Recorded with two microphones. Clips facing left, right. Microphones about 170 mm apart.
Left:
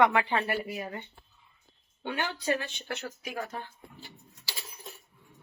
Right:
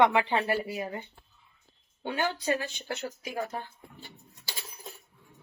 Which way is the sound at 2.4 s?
30° right (ahead or behind).